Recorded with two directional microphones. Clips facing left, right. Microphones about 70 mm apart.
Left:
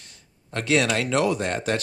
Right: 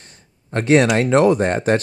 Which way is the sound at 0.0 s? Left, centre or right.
Right.